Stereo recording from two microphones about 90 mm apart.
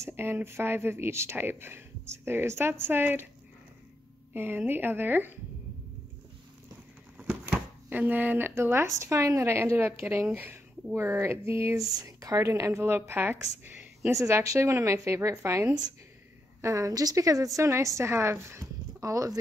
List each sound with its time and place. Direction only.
0.0 s speech: 25° right (ahead or behind)
4.3 s speech: 20° right (ahead or behind)
7.2 s speech: 15° right (ahead or behind); by 19.3 s 40° right (ahead or behind)